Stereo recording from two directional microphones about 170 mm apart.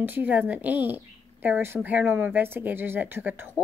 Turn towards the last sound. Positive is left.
turn(degrees=-10)  # may be behind; listen again after turning